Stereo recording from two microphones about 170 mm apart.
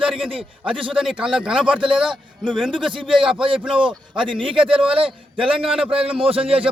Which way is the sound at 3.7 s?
30° right (ahead or behind).